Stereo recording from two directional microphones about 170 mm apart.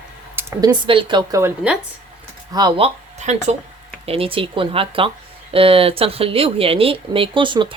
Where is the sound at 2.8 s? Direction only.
40° right (ahead or behind).